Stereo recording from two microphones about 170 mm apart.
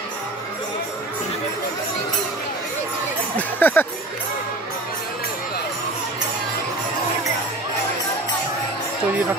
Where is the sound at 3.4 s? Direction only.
10° left (ahead or behind).